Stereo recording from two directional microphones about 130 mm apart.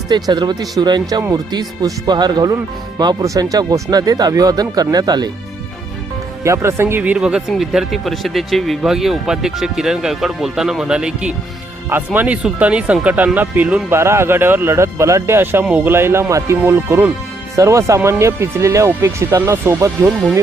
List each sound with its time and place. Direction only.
0.1 s speech: 35° right (ahead or behind)
6.4 s speech: 20° right (ahead or behind)